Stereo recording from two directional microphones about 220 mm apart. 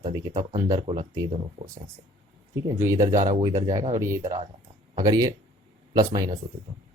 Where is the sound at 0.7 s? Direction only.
30° right (ahead or behind).